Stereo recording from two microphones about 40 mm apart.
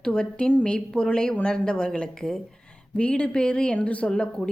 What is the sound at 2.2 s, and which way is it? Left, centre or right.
Speech, centre.